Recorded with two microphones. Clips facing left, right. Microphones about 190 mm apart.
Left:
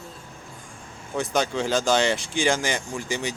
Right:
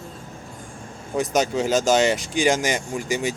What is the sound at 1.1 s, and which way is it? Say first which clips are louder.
Speech: right 3 dB; 20° right (ahead or behind).